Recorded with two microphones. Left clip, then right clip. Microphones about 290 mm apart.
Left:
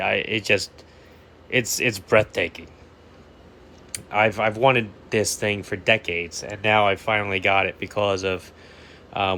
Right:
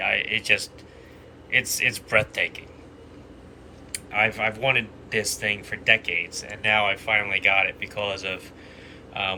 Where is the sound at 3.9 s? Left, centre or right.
Centre.